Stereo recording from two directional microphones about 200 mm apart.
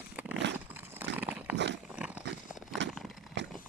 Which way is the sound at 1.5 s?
60° right (ahead or behind).